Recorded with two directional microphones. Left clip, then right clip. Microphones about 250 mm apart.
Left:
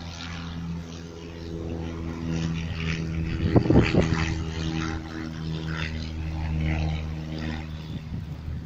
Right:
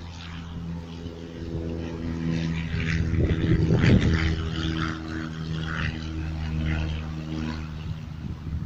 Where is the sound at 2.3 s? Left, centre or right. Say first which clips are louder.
Right 1 dB; centre.